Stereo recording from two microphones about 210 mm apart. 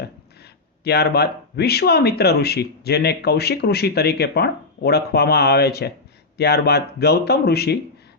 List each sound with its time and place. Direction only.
0.0 s speech: 50° left (ahead or behind)